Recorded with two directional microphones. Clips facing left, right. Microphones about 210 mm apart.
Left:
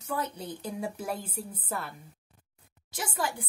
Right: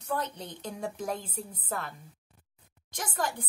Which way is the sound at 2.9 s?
10° left (ahead or behind).